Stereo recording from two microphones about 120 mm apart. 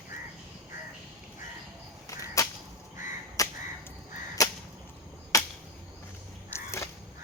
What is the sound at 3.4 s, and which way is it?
Crow, 30° left (ahead or behind).